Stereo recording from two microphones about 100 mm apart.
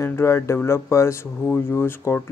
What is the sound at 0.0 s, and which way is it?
Speech, 25° left (ahead or behind).